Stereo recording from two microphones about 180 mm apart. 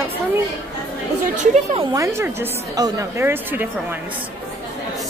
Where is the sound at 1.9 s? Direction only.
15° right (ahead or behind).